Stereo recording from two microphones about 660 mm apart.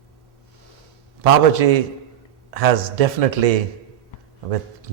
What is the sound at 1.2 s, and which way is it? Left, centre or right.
A man's voice, right.